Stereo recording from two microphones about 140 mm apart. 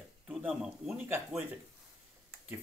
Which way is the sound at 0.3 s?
5° right (ahead or behind).